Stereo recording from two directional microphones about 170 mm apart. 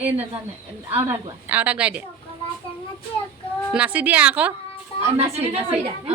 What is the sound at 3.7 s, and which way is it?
Speech, 10° right (ahead or behind).